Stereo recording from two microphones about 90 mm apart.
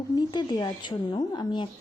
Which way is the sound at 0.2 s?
50° left (ahead or behind).